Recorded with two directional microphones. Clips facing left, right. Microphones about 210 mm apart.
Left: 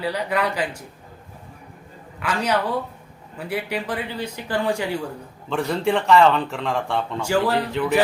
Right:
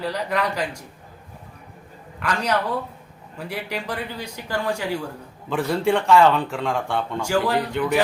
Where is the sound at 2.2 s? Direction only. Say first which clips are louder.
Left 1 dB; 5° left (ahead or behind).